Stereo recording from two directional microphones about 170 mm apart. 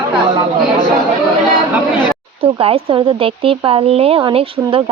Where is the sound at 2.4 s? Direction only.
35° right (ahead or behind).